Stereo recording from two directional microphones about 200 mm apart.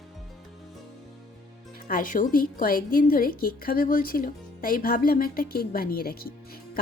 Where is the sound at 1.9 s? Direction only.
45° left (ahead or behind).